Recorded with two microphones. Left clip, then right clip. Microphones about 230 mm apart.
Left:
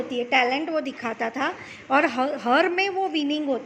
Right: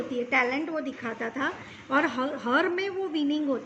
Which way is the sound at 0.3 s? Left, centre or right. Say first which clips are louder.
Left 5 dB; left.